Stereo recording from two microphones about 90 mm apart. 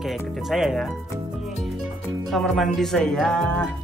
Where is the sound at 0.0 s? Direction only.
Centre (ahead or behind).